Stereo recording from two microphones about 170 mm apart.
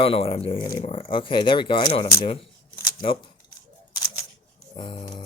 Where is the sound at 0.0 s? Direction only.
35° left (ahead or behind).